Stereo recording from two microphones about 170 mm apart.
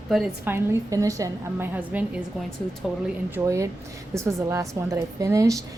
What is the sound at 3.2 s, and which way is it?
A woman's voice, 15° right (ahead or behind).